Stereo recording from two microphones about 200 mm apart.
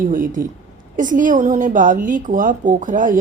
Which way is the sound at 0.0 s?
45° right (ahead or behind).